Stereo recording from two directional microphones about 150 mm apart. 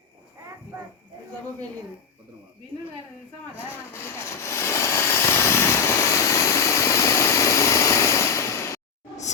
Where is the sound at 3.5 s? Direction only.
15° left (ahead or behind).